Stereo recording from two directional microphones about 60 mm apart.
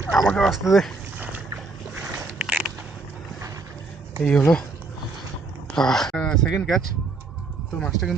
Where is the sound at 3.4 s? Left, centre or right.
Right.